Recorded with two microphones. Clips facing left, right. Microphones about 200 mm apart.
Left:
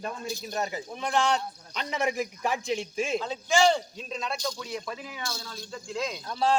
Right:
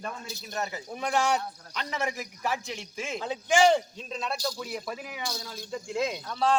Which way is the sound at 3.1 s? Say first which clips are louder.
Right 3 dB; 15° right (ahead or behind).